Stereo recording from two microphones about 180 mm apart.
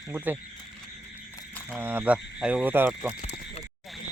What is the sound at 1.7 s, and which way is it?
Speech, 10° right (ahead or behind).